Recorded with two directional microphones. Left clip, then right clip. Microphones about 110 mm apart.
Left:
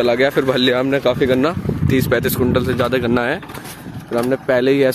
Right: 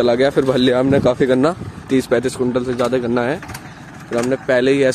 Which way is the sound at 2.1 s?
15° right (ahead or behind).